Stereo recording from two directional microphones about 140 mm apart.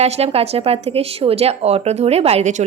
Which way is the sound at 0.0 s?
45° right (ahead or behind).